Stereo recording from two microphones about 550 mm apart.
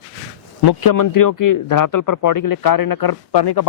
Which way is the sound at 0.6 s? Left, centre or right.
Left.